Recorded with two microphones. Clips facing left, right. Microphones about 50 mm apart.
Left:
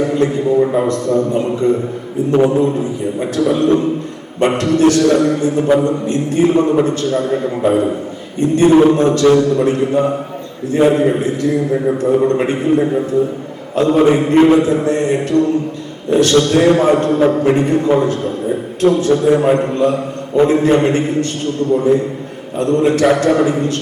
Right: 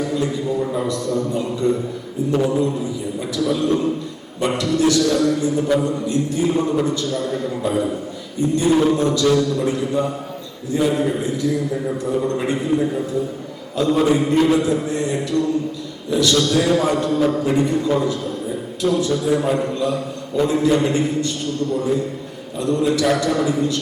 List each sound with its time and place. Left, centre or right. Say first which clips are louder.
0.0 s a man's voice: left 7 dB; left
8.7 s a man's voice: left 6 dB; left